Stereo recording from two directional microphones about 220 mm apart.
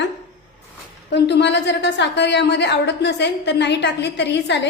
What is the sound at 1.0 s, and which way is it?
A woman's voice, 50° left (ahead or behind).